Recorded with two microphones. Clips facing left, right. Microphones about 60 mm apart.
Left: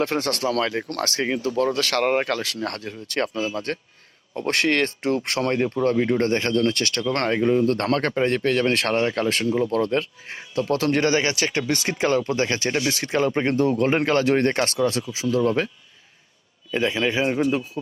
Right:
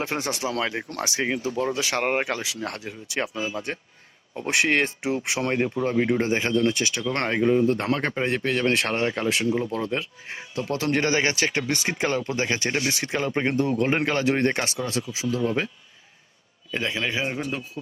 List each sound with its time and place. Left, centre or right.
0.0 s a man's voice: centre
10.7 s speech: right
12.7 s speech: right
13.3 s speech: centre
15.3 s speech: left
16.7 s a man's voice: centre